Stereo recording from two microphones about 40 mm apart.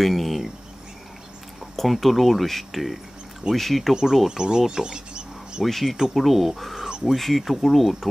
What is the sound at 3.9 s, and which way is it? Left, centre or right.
Speech, centre.